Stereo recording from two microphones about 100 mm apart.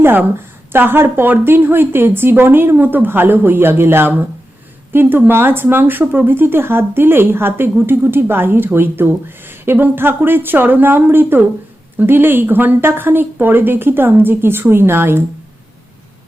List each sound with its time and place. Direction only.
0.0 s speech: 20° right (ahead or behind)